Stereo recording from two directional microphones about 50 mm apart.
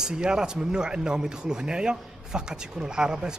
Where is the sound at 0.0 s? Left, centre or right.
Centre.